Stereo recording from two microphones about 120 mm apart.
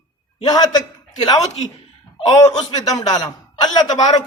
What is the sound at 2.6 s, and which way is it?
Speech, 35° left (ahead or behind).